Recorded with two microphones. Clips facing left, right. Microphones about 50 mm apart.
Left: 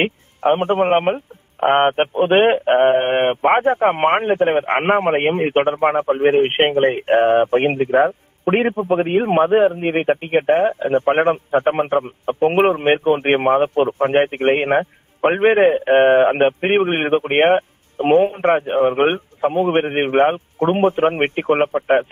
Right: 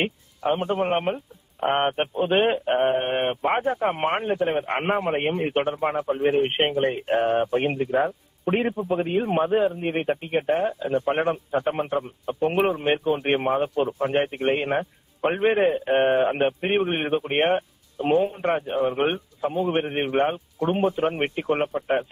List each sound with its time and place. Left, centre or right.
0.0 s a man's voice: left